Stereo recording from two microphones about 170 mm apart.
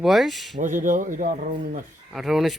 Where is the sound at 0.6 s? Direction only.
50° right (ahead or behind).